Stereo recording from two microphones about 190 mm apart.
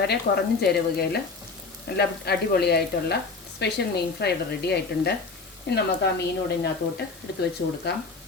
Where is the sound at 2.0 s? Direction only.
55° left (ahead or behind).